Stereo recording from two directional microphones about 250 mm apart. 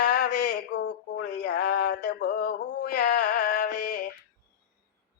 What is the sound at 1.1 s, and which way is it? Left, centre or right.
Male singing, left.